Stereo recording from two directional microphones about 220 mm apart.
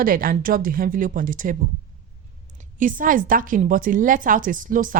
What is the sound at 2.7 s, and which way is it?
A woman's voice, 35° right (ahead or behind).